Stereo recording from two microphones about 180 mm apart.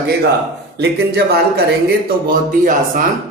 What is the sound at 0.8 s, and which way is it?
Speech, 65° right (ahead or behind).